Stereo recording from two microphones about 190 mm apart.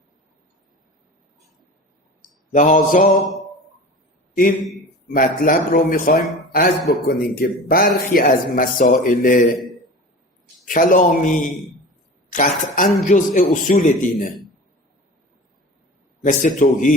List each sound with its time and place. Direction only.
2.5 s a man's voice: 40° left (ahead or behind)
5.1 s a man's voice: 50° left (ahead or behind)
10.7 s a man's voice: 45° left (ahead or behind)
16.2 s a man's voice: 45° left (ahead or behind)